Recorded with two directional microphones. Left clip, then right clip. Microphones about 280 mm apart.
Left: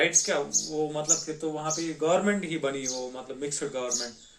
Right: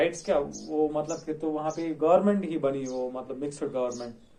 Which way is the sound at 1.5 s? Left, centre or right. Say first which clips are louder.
Right 1 dB; left.